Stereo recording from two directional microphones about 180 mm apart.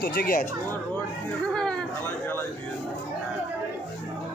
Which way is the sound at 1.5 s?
5° left (ahead or behind).